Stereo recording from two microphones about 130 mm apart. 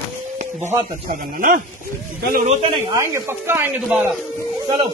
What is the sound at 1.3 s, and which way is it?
Speech, 90° right.